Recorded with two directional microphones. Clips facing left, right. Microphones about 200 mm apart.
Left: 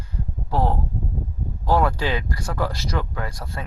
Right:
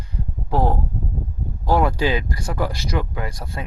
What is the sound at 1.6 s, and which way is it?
Speech, 15° right (ahead or behind).